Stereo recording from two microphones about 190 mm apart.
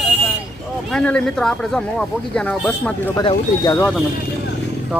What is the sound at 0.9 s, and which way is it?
Speech, 5° left (ahead or behind).